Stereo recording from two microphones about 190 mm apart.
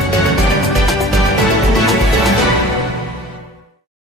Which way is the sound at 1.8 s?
Centre (ahead or behind).